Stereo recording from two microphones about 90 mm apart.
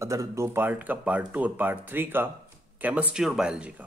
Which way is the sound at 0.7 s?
20° right (ahead or behind).